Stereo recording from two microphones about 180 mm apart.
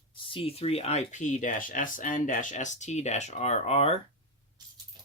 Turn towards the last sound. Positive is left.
turn(degrees=35)  # may be behind; listen again after turning